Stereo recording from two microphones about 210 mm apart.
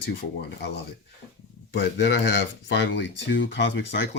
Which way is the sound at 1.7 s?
55° left (ahead or behind).